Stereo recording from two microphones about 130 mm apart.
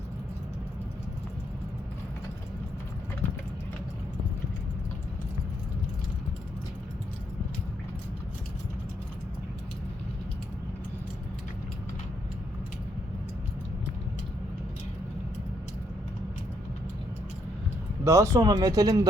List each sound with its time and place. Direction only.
18.0 s speech: 25° right (ahead or behind)